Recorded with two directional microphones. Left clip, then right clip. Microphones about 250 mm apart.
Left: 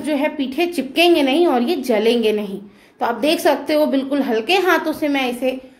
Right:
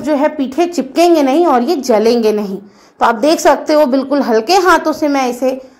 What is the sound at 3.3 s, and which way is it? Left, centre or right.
Speech, centre.